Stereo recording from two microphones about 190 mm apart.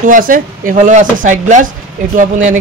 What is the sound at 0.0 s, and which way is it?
Speech, 45° right (ahead or behind).